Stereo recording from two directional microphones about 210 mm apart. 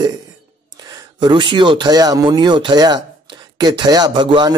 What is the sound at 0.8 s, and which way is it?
Speech, 20° right (ahead or behind).